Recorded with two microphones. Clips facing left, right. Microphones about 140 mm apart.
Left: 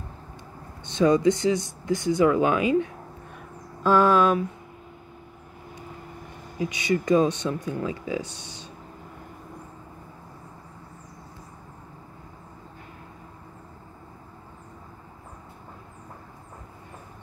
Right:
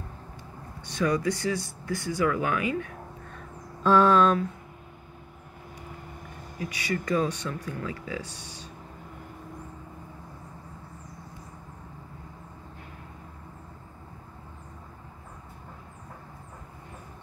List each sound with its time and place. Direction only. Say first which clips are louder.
0.8 s speech: left 7 dB; 25° left (ahead or behind)
3.8 s a sound: left 1 dB; 5° left (ahead or behind)
6.6 s speech: left 6 dB; 20° left (ahead or behind)